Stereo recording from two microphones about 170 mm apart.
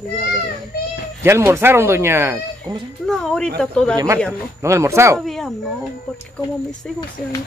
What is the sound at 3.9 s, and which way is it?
Speech, 15° right (ahead or behind).